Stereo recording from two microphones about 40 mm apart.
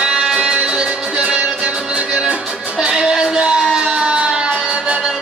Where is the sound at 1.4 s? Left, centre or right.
Right.